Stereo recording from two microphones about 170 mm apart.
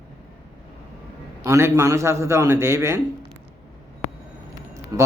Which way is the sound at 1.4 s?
15° right (ahead or behind).